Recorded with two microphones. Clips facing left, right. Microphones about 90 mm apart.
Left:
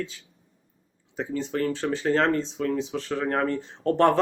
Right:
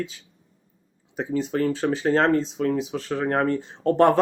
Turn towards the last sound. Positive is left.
turn(degrees=-10)  # may be behind; listen again after turning